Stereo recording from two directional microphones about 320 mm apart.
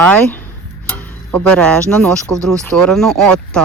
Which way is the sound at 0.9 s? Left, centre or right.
Centre.